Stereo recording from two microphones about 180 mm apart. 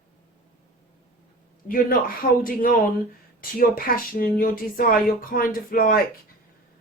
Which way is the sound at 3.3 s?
55° left (ahead or behind).